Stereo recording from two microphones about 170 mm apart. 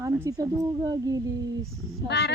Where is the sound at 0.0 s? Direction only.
20° right (ahead or behind).